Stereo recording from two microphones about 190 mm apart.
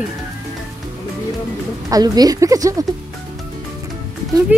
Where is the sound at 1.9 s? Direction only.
20° right (ahead or behind).